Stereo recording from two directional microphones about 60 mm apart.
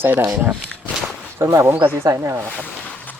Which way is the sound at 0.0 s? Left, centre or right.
Right.